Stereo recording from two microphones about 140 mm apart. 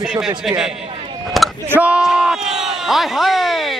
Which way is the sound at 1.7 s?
10° right (ahead or behind).